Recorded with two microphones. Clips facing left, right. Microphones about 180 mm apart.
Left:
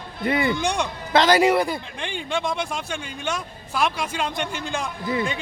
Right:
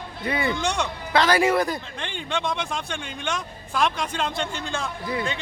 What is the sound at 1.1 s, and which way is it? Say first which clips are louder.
Speech: left 3 dB; 25° left (ahead or behind).